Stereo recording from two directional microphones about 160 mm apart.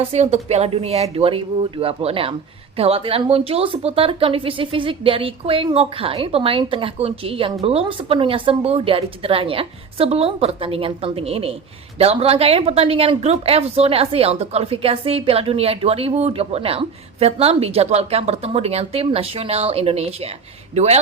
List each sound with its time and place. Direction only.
0.1 s a woman's voice: 40° right (ahead or behind)